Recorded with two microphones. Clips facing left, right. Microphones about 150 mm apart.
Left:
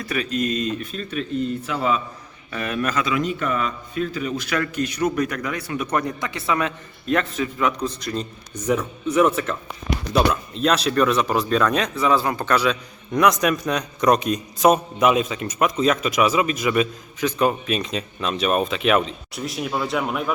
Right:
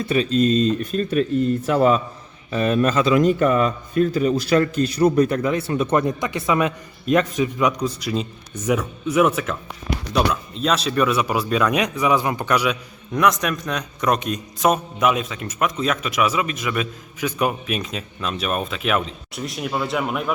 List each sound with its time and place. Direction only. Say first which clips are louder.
0.0 s speech: right 6 dB; 25° right (ahead or behind); by 2.0 s 45° right (ahead or behind)
2.5 s a man's voice: right 6 dB; 25° right (ahead or behind)
3.2 s a man's voice: right 7 dB; 40° right (ahead or behind); by 12.7 s 10° right (ahead or behind)
13.1 s a man's voice: left 1 dB; centre (ahead or behind)
17.2 s a man's voice: left 2 dB; 10° right (ahead or behind)